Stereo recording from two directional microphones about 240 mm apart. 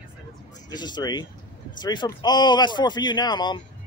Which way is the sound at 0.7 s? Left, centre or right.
Centre.